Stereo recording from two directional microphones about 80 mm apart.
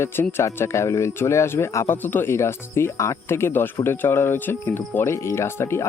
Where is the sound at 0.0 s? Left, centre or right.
Left.